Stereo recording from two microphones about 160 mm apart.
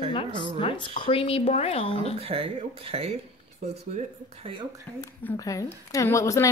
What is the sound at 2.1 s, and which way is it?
Speech, 35° right (ahead or behind).